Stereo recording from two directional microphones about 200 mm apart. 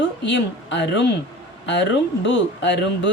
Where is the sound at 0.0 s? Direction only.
65° left (ahead or behind).